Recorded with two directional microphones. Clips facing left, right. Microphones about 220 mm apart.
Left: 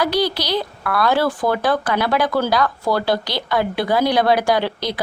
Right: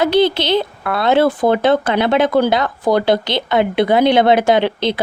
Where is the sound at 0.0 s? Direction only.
25° right (ahead or behind).